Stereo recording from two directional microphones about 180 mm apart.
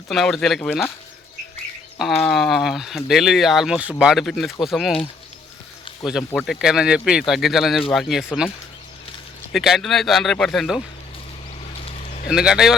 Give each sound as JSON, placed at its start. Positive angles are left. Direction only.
{"t": 0.1, "sound": "speech", "side_deg": 0}
{"t": 2.2, "sound": "speech", "side_deg": 0}
{"t": 6.3, "sound": "speech", "side_deg": 0}
{"t": 9.5, "sound": "speech", "side_deg": 0}
{"t": 11.9, "sound": "a sound", "side_deg": 35}
{"t": 12.3, "sound": "speech", "side_deg": -5}